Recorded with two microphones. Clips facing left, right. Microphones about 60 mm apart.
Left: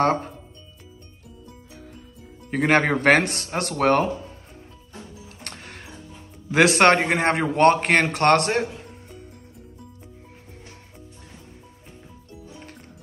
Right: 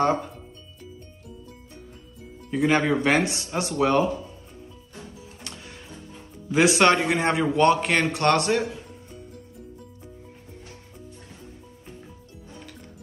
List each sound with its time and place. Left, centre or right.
0.0 s a man's voice: left
2.5 s a man's voice: left
5.4 s music: left
6.5 s a man's voice: left
6.8 s a man's voice: left